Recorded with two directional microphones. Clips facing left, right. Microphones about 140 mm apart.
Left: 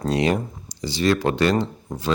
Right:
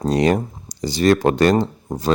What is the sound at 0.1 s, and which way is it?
Speech, 40° right (ahead or behind).